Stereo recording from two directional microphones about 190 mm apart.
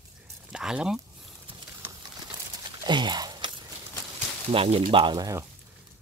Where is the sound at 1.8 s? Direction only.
10° right (ahead or behind).